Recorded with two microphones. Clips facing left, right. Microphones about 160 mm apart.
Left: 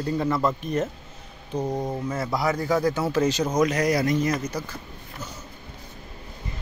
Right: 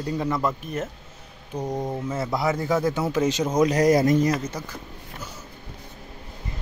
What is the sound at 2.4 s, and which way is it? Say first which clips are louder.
A man's voice: even; 20° right (ahead or behind).